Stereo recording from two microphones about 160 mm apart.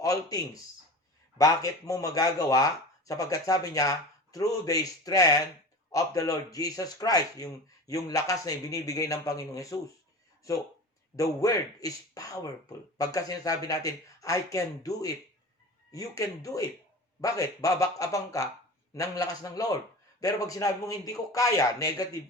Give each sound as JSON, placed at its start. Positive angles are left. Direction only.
{"t": 0.0, "sound": "speech", "side_deg": 20}
{"t": 11.2, "sound": "speech", "side_deg": 20}